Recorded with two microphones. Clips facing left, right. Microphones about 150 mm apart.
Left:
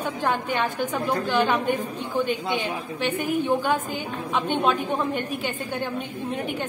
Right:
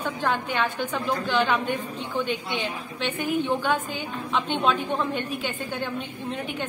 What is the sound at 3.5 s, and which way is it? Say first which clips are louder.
A woman's voice: left 2 dB; 10° left (ahead or behind).